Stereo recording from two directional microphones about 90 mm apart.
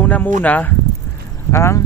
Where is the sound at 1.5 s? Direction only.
30° left (ahead or behind).